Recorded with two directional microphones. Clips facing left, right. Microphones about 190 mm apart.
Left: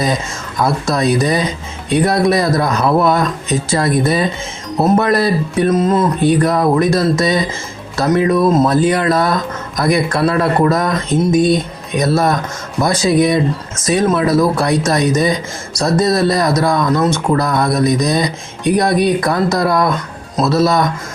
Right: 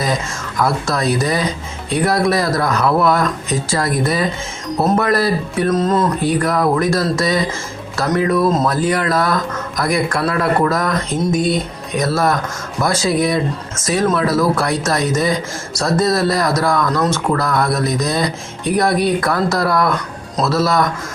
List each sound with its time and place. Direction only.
0.0 s speech: 20° left (ahead or behind)
5.7 s speech: 5° left (ahead or behind)
6.2 s speech: 25° left (ahead or behind)